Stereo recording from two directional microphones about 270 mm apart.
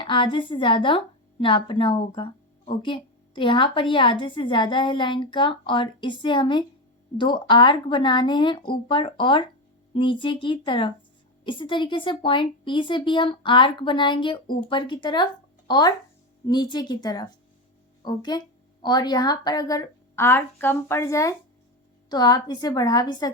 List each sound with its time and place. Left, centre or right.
0.0 s a woman's voice: centre